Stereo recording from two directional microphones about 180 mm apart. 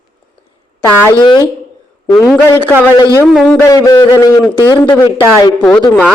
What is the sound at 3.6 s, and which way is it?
A man's voice, 20° left (ahead or behind).